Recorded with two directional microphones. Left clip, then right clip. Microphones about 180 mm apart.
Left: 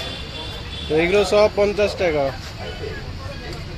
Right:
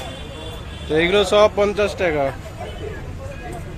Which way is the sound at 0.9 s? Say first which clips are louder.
Right 1 dB; centre (ahead or behind).